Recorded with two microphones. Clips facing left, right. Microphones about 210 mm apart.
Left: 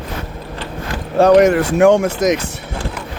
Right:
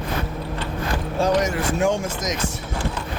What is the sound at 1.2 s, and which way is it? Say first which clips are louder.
Speech: left 11 dB; 65° left (ahead or behind).